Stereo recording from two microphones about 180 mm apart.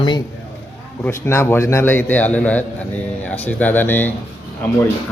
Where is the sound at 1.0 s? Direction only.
15° left (ahead or behind).